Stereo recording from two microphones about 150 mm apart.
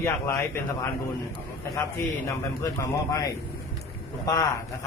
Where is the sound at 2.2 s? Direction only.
20° left (ahead or behind).